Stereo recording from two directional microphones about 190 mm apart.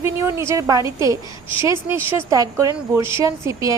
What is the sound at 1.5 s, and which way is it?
Speech, 25° left (ahead or behind).